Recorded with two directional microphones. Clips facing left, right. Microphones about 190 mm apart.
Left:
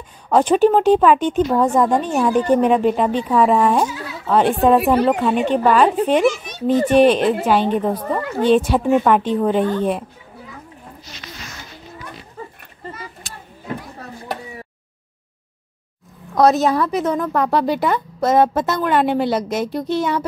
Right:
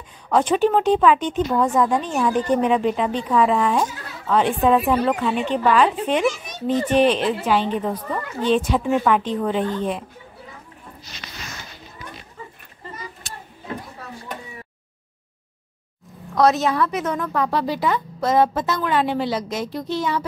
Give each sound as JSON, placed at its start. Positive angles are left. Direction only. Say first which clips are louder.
{"t": 0.3, "sound": "speech", "louder": "left 4 dB", "side_deg": 45}
{"t": 4.7, "sound": "a woman's voice", "louder": "left 4 dB", "side_deg": 65}
{"t": 5.0, "sound": "speech", "louder": "left 4 dB", "side_deg": 40}
{"t": 16.3, "sound": "a woman's voice", "louder": "left 3 dB", "side_deg": 40}
{"t": 17.4, "sound": "a woman's voice", "louder": "left 3 dB", "side_deg": 55}